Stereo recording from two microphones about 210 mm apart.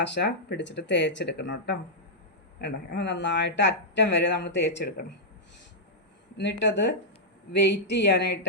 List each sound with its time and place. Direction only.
0.0 s speech: 55° left (ahead or behind)
6.3 s speech: 55° left (ahead or behind)